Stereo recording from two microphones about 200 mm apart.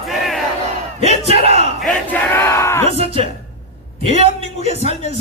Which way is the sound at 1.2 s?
30° right (ahead or behind).